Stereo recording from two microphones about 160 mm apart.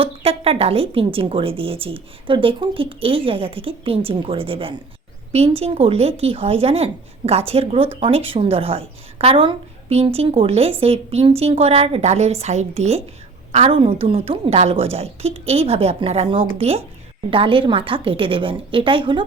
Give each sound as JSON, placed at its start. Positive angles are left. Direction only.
{"t": 0.0, "sound": "speech", "side_deg": -40}